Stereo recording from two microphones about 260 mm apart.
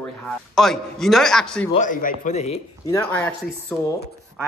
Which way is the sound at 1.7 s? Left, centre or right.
Left.